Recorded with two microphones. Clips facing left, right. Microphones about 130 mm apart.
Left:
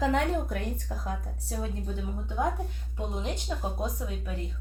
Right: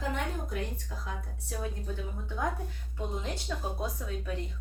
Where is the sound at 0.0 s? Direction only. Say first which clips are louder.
Left 8 dB; 75° left (ahead or behind).